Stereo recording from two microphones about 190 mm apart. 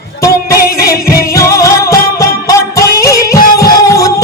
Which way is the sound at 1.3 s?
15° left (ahead or behind).